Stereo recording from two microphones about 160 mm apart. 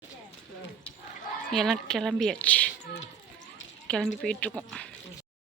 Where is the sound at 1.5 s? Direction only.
Centre (ahead or behind).